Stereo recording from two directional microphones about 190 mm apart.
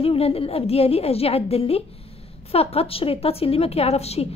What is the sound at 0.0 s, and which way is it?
A woman's voice, 30° left (ahead or behind).